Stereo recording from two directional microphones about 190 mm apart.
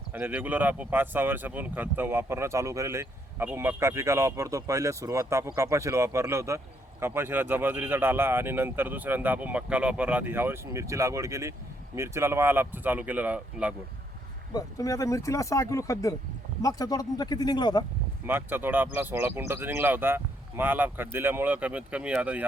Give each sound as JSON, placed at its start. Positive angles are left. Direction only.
{"t": 0.1, "sound": "speech", "side_deg": -10}
{"t": 14.5, "sound": "speech", "side_deg": 15}
{"t": 18.3, "sound": "speech", "side_deg": -10}